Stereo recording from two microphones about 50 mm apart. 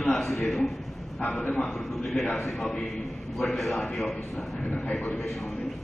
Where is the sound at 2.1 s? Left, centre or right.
Centre.